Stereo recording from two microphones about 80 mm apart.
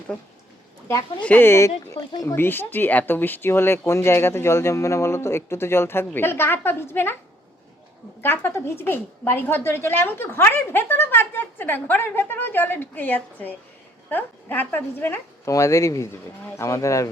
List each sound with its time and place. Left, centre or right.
1.2 s a woman's voice: centre
1.5 s speech: left
8.2 s a woman's voice: left
15.4 s speech: left